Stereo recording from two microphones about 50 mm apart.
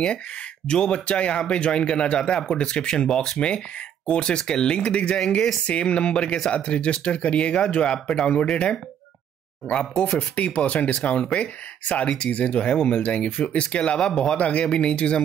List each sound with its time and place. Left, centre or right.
0.7 s speech: centre
3.3 s speech: left
13.9 s speech: centre
14.3 s speech: left